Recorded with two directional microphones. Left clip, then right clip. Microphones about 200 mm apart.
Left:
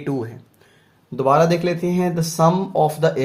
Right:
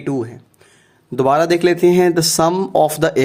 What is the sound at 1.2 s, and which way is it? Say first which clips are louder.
Speech: right 3 dB; 50° right (ahead or behind).